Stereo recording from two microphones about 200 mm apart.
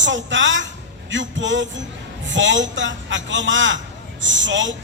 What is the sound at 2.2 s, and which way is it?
A woman's voice, 65° right (ahead or behind).